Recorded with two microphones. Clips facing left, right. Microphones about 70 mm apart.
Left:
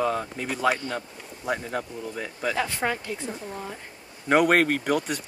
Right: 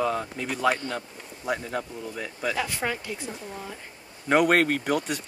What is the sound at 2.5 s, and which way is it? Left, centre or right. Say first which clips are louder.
Speech: left 2 dB; centre.